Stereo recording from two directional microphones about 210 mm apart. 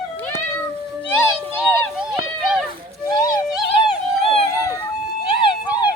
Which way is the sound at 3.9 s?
25° left (ahead or behind).